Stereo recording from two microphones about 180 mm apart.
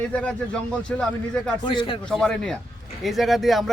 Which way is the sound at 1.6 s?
30° left (ahead or behind).